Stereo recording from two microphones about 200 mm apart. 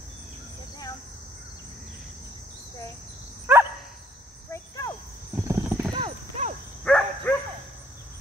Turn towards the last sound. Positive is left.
turn(degrees=5)  # may be behind; listen again after turning